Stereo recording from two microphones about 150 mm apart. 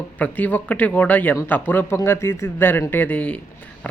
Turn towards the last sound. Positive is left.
turn(degrees=10)  # may be behind; listen again after turning